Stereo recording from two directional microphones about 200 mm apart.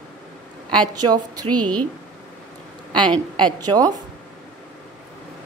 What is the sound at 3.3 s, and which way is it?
Speech, 20° right (ahead or behind).